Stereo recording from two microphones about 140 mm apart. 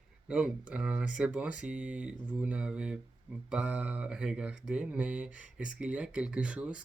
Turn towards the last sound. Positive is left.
turn(degrees=-10)  # may be behind; listen again after turning